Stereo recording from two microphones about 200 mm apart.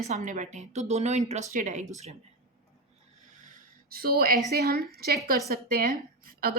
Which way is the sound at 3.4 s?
40° right (ahead or behind).